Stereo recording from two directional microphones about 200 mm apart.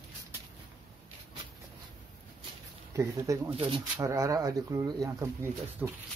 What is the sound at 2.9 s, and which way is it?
Speech, 15° right (ahead or behind).